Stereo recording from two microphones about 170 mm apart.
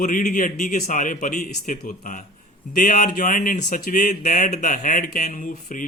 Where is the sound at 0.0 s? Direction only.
50° left (ahead or behind).